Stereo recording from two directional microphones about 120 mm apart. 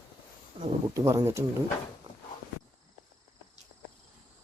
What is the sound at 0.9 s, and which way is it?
Speech, 25° right (ahead or behind).